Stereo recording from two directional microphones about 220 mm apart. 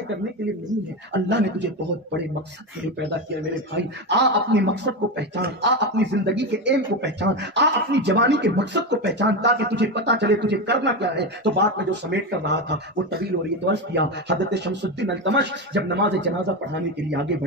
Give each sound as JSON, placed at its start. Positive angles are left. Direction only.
{"t": 1.1, "sound": "a man's voice", "side_deg": -50}
{"t": 3.7, "sound": "a man's voice", "side_deg": -50}